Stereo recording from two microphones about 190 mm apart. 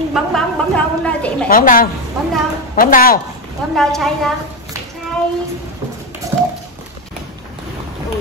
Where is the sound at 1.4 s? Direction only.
50° left (ahead or behind).